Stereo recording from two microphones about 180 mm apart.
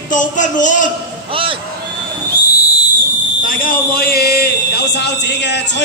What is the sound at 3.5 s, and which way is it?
A man's voice, 50° left (ahead or behind).